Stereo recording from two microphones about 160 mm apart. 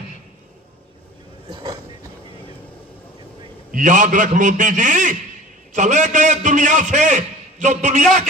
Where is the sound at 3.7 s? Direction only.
55° right (ahead or behind).